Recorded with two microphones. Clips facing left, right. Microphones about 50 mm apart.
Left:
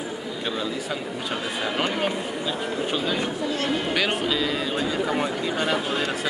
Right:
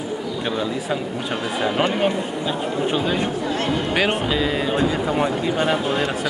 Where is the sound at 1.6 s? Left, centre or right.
Right.